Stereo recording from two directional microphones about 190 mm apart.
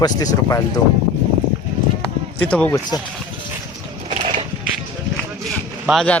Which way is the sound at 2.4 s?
5° left (ahead or behind).